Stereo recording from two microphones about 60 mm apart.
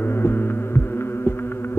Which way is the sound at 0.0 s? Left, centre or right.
Left.